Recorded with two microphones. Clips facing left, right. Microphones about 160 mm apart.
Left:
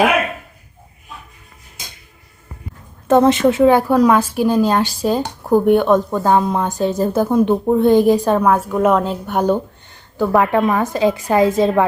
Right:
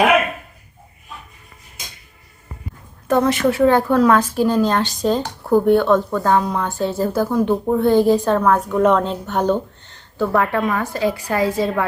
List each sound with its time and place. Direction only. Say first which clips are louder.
3.1 s a woman's voice: left 4 dB; 25° left (ahead or behind)